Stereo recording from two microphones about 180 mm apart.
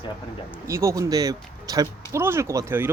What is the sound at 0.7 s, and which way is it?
Speech, 15° right (ahead or behind).